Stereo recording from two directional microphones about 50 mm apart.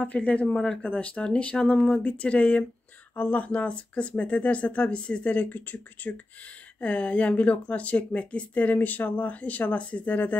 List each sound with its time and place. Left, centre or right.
0.0 s speech: left
0.5 s speech: centre
0.8 s speech: left